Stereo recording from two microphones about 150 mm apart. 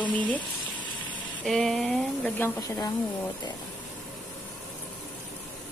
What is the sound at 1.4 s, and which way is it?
Speech, centre (ahead or behind).